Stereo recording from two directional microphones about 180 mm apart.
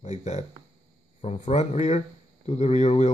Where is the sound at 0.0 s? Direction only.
40° left (ahead or behind).